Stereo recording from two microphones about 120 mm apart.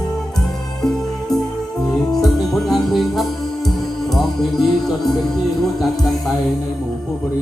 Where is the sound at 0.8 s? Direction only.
5° left (ahead or behind).